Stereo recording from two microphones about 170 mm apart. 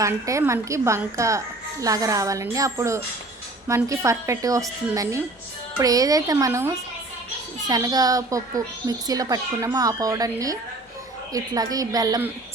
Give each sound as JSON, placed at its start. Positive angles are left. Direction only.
{"t": 0.0, "sound": "a woman's voice", "side_deg": -20}